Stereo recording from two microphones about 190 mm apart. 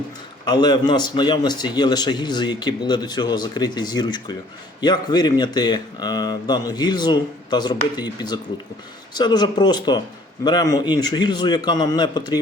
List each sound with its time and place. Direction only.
0.4 s a man's voice: 20° left (ahead or behind)